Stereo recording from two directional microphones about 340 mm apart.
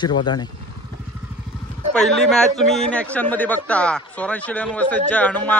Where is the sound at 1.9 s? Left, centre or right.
Centre.